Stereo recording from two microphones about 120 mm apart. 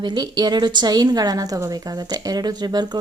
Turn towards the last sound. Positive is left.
turn(degrees=-35)  # may be behind; listen again after turning